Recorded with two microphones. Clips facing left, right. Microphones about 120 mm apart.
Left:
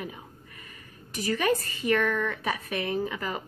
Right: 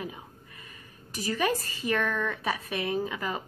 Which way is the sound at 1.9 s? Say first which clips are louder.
Left 3 dB; centre (ahead or behind).